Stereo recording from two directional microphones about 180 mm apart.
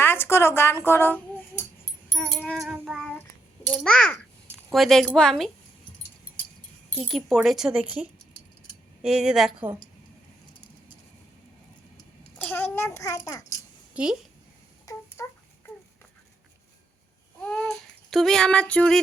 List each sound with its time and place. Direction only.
0.0 s speech: 15° left (ahead or behind)
2.1 s child singing: 5° left (ahead or behind)
3.7 s a woman's voice: centre (ahead or behind)
6.9 s speech: 5° right (ahead or behind)
12.4 s a child's voice: 10° left (ahead or behind)
13.9 s speech: 5° right (ahead or behind)
14.8 s a sound: 15° left (ahead or behind)
17.4 s child singing: 5° left (ahead or behind)